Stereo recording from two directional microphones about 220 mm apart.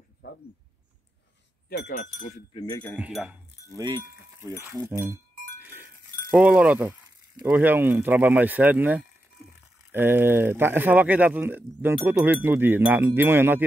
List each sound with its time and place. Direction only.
1.7 s speech: 40° left (ahead or behind)
2.5 s speech: 20° left (ahead or behind)
3.0 s speech: 5° right (ahead or behind)
3.7 s speech: 20° right (ahead or behind)
5.6 s goat: 10° right (ahead or behind)
6.3 s speech: 5° right (ahead or behind)